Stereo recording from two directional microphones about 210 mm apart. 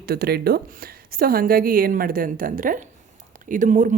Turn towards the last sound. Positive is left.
turn(degrees=-35)  # may be behind; listen again after turning